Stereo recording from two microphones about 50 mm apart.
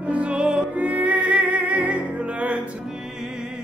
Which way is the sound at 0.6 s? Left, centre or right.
Right.